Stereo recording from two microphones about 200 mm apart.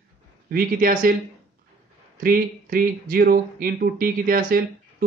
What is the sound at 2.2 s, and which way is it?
Speech, 45° right (ahead or behind).